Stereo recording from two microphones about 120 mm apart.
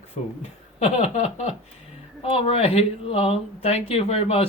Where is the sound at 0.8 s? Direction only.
65° left (ahead or behind).